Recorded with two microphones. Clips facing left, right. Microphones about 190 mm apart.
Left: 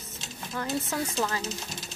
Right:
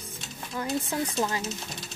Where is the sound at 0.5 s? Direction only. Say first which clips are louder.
Right 1 dB; 15° right (ahead or behind).